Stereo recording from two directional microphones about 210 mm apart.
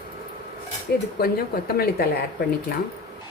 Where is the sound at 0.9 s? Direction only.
50° left (ahead or behind).